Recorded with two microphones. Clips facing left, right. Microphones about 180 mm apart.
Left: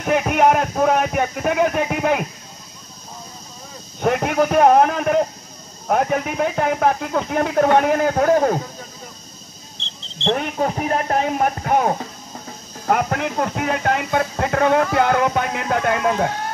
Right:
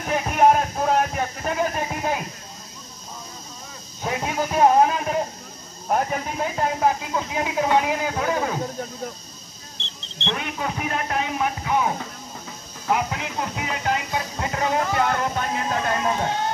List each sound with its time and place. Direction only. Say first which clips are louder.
0.0 s speech: left 2 dB; 70° left (ahead or behind)
4.0 s speech: left 8 dB; 65° left (ahead or behind); by 8.5 s 50° left (ahead or behind)
10.2 s speech: left 8 dB; 45° left (ahead or behind); by 16.3 s 65° left (ahead or behind)